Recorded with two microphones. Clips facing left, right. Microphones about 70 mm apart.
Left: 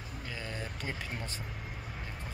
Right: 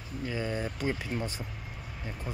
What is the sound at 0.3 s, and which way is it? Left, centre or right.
Speech, right.